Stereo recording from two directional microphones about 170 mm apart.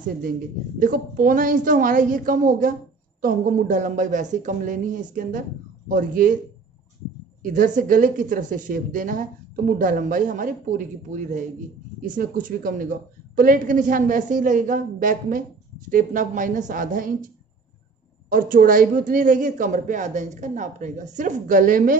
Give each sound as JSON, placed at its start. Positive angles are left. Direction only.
{"t": 0.7, "sound": "a woman's voice", "side_deg": -50}
{"t": 7.4, "sound": "a woman's voice", "side_deg": -50}
{"t": 18.3, "sound": "a woman's voice", "side_deg": -55}